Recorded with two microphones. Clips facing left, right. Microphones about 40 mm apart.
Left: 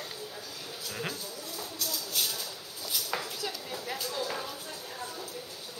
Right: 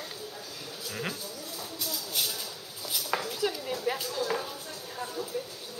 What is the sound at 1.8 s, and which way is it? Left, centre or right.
Music, centre.